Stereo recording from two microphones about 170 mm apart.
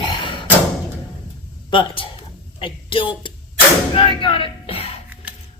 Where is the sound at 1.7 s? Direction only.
30° left (ahead or behind).